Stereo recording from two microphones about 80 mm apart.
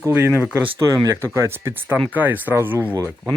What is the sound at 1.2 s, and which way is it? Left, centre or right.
Speech, right.